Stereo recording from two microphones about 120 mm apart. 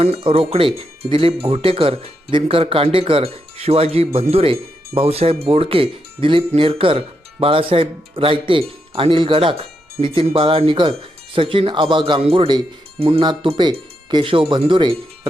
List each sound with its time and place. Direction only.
0.0 s speech: 55° right (ahead or behind)
13.2 s speech: 40° right (ahead or behind)